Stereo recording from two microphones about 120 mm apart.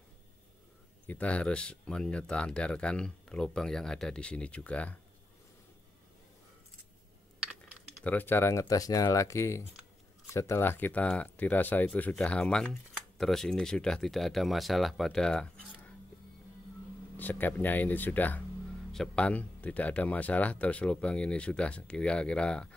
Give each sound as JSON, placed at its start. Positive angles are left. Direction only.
{"t": 1.0, "sound": "speech", "side_deg": 10}
{"t": 8.0, "sound": "speech", "side_deg": 15}
{"t": 17.2, "sound": "speech", "side_deg": 15}